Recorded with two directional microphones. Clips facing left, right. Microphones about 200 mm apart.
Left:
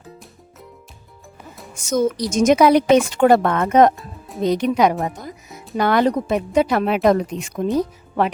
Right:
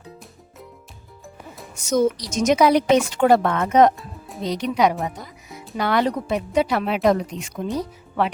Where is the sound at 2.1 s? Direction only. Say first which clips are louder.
Left 4 dB; 50° left (ahead or behind).